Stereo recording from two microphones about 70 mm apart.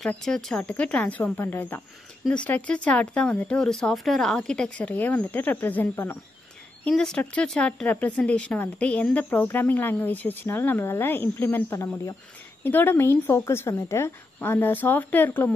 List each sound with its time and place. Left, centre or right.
0.0 s speech: centre
0.7 s a woman's voice: centre
2.2 s speech: centre
6.9 s speech: centre; by 11.6 s left
11.7 s speech: left
12.6 s a woman's voice: left